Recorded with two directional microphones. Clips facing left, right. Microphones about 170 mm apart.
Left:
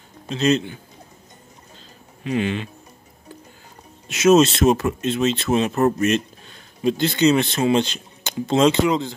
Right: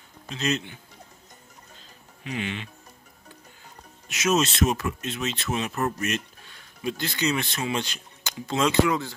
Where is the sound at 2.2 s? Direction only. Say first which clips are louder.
Left 9 dB; 40° left (ahead or behind).